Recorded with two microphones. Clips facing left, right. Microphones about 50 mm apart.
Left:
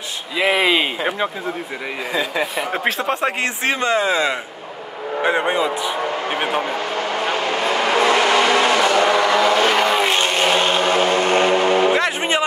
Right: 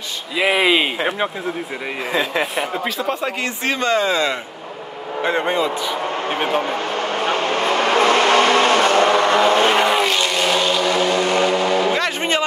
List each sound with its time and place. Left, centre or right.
0.4 s speech: centre
2.7 s a man's voice: left
3.8 s a man's voice: left
7.7 s vehicle: right
10.0 s vehicle: left
12.2 s a sound: centre